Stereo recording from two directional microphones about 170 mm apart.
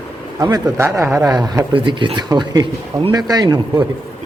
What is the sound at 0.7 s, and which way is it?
Speech, 15° right (ahead or behind).